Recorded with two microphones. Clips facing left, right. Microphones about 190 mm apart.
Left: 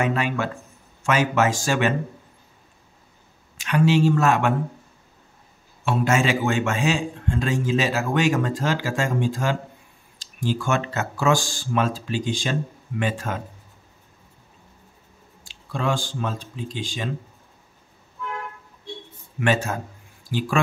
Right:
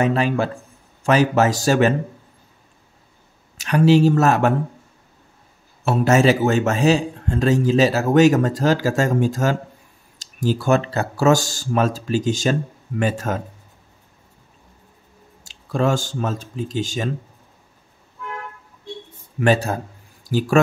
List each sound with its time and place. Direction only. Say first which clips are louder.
0.0 s a man's voice: right 5 dB; 35° right (ahead or behind)
3.5 s a man's voice: right 5 dB; 40° right (ahead or behind)
5.9 s a man's voice: right 6 dB; 40° right (ahead or behind)
15.4 s speech: right 6 dB; 45° right (ahead or behind)
19.4 s a man's voice: right 4 dB; 35° right (ahead or behind)